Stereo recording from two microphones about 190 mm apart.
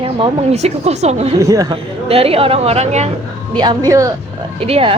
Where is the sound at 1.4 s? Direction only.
15° right (ahead or behind).